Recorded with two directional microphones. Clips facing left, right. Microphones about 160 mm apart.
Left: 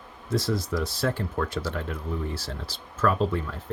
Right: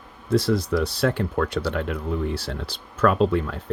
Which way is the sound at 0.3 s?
65° right (ahead or behind).